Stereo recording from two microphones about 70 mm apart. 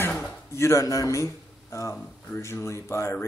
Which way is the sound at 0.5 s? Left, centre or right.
Left.